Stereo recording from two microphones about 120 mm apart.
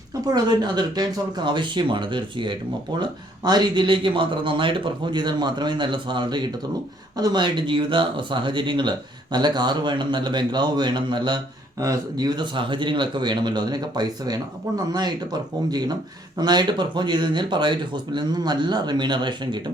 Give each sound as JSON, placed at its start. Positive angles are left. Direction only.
{"t": 0.3, "sound": "speech", "side_deg": -35}